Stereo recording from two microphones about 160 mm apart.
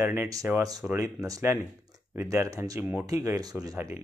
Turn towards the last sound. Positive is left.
turn(degrees=-20)  # may be behind; listen again after turning